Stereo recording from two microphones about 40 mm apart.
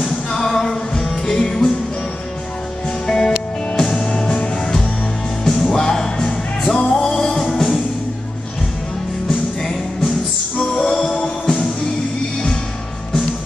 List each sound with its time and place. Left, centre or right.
0.0 s music: centre
3.1 s music: centre
9.3 s music: centre